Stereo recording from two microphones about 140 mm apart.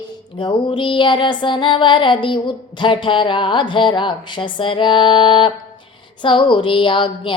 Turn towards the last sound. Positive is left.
turn(degrees=35)  # may be behind; listen again after turning